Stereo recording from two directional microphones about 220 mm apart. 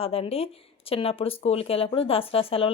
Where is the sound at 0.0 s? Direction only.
25° left (ahead or behind).